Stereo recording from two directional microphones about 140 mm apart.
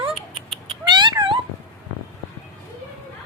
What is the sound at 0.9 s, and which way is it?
Cat, 30° right (ahead or behind).